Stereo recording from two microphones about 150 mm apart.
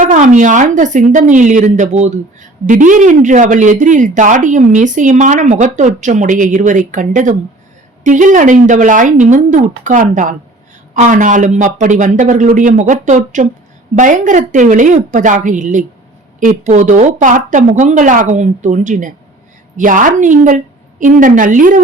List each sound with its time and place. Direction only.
0.1 s a woman's voice: 55° right (ahead or behind)